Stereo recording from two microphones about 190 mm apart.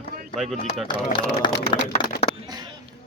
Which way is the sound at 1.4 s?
25° left (ahead or behind).